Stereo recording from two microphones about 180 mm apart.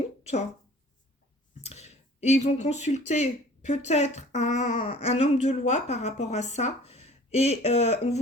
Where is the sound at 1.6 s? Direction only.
35° left (ahead or behind).